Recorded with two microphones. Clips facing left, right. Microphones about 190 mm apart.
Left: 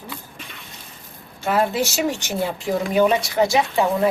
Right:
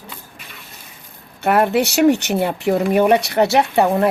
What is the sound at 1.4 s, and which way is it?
Speech, 65° right (ahead or behind).